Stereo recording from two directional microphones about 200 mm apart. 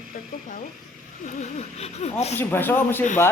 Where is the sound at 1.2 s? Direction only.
35° left (ahead or behind).